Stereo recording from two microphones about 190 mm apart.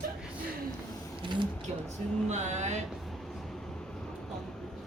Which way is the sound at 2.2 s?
35° right (ahead or behind).